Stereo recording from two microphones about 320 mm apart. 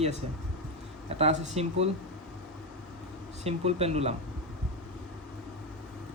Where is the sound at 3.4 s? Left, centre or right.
Centre.